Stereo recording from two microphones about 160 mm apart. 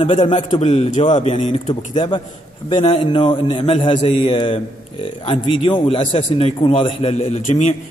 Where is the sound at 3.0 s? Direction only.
30° left (ahead or behind); by 7.7 s 50° left (ahead or behind).